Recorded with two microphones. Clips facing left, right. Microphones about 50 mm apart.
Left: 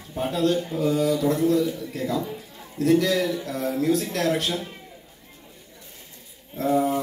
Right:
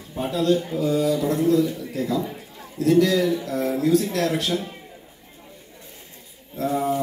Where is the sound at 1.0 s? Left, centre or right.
Right.